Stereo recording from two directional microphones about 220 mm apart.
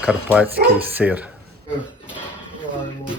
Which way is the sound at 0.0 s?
5° right (ahead or behind).